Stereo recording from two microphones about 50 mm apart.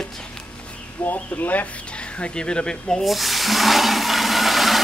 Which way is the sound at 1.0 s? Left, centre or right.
Left.